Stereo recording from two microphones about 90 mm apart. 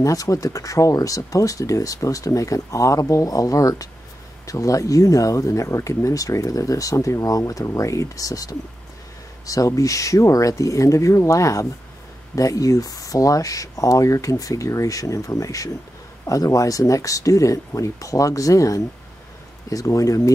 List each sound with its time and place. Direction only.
0.0 s speech: 40° left (ahead or behind)